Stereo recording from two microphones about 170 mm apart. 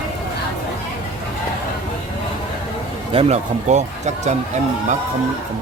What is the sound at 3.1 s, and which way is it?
Speech, 35° right (ahead or behind).